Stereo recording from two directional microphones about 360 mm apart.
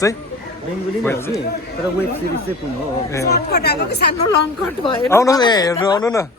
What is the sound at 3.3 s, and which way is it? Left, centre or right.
Speech, left.